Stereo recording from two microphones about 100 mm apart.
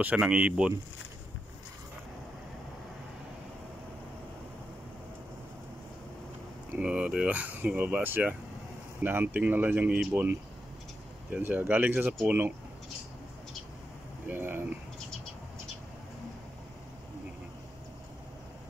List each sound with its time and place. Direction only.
0.0 s speech: 15° right (ahead or behind)
6.7 s speech: 10° right (ahead or behind)
11.3 s speech: 20° right (ahead or behind)
14.2 s speech: 20° right (ahead or behind)